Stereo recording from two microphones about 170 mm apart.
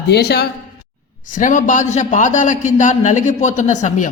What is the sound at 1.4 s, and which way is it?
A man's voice, 50° left (ahead or behind).